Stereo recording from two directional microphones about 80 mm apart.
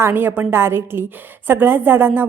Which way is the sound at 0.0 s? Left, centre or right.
Right.